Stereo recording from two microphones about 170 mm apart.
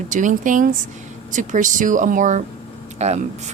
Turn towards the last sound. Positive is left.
turn(degrees=-40)  # may be behind; listen again after turning